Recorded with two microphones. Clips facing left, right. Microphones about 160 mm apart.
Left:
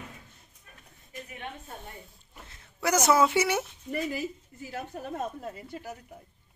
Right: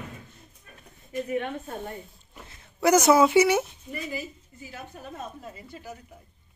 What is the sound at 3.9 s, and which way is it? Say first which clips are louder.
A woman's voice: left 3 dB; 60° left (ahead or behind).